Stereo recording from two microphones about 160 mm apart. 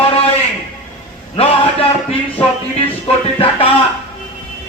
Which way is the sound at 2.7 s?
35° left (ahead or behind).